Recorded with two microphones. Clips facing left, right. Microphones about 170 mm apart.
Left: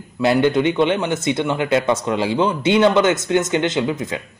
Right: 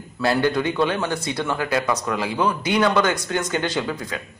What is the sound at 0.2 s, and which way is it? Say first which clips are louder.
Speech: left 5 dB; 20° left (ahead or behind).